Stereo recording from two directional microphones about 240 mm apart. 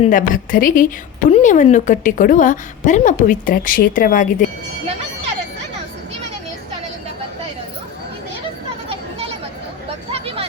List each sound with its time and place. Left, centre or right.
0.0 s a woman's voice: left
10.1 s vehicle: right